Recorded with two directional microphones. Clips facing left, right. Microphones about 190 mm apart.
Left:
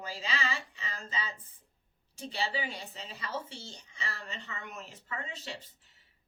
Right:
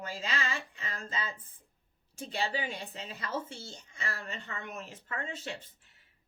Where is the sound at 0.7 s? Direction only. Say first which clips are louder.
Right 1 dB; 50° right (ahead or behind).